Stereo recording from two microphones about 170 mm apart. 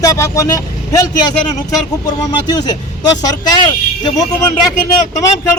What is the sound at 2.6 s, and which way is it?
A man's voice, 25° left (ahead or behind).